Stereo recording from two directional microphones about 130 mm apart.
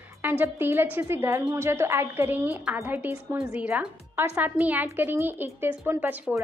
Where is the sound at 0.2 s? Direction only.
15° right (ahead or behind).